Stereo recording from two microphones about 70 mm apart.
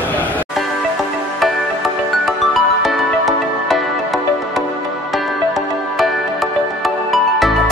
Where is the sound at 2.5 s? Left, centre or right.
Centre.